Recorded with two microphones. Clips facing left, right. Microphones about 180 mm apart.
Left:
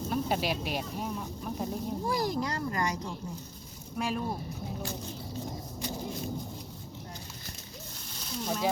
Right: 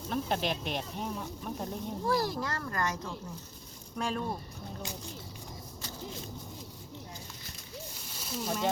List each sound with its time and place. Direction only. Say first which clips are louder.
0.1 s speech: left 1 dB; 5° left (ahead or behind)
2.0 s a child's voice: right 1 dB; 15° left (ahead or behind)
8.2 s speech: left 1 dB; 5° right (ahead or behind)